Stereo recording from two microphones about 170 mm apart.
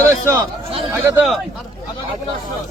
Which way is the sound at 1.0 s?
5° right (ahead or behind).